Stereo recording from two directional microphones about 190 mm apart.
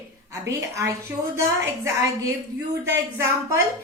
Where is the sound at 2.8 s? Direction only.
15° right (ahead or behind).